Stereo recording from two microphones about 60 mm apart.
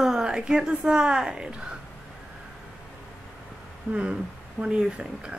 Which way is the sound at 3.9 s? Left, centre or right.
Centre.